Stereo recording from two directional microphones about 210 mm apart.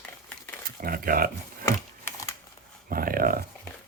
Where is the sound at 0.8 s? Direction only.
45° right (ahead or behind).